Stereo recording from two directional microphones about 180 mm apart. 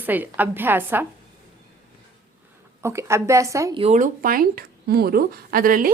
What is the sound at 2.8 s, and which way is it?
Speech, 15° right (ahead or behind).